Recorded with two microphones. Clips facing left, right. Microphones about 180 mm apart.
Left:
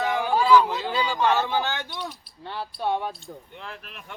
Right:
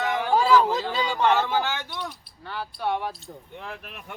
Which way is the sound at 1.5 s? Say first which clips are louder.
Even; 15° left (ahead or behind).